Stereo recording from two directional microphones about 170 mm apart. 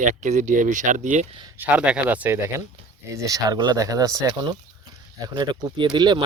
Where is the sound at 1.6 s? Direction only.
10° right (ahead or behind).